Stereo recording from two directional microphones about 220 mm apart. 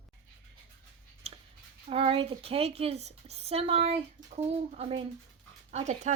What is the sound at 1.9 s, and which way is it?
A woman's voice, 25° right (ahead or behind).